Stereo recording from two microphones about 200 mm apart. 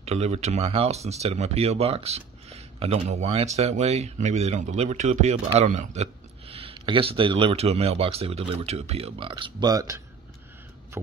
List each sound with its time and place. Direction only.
0.0 s speech: 30° right (ahead or behind); by 10.0 s 15° right (ahead or behind)